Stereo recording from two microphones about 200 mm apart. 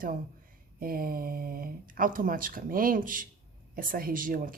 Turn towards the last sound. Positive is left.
turn(degrees=-45)  # may be behind; listen again after turning